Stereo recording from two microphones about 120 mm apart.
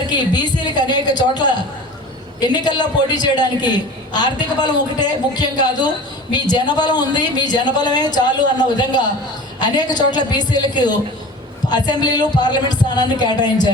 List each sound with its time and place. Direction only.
0.1 s a man's voice: 35° left (ahead or behind)